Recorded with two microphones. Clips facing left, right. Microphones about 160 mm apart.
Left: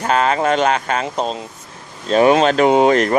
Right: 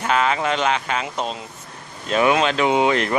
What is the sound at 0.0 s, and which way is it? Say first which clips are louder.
Speech: left 4 dB; 40° left (ahead or behind).